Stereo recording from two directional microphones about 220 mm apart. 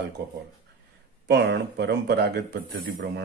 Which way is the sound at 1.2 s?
50° right (ahead or behind).